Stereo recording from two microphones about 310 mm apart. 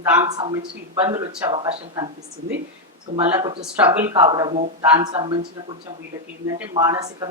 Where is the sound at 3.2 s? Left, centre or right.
Centre.